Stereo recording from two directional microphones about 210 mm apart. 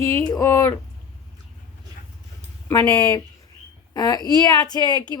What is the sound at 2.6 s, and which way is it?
A woman's voice, 10° left (ahead or behind).